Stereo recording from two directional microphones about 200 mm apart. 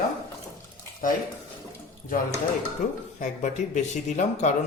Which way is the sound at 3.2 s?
35° left (ahead or behind).